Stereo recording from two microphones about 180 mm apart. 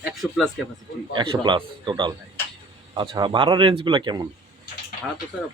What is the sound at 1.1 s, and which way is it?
Speech, 25° right (ahead or behind).